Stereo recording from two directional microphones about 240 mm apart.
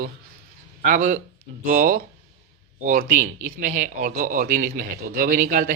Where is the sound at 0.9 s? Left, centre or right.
Right.